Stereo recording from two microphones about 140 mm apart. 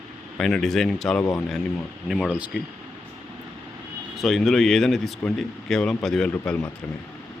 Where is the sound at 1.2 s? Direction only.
25° left (ahead or behind).